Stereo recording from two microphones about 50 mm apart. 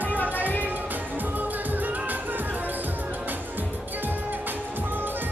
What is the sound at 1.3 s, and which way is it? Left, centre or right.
Music, right.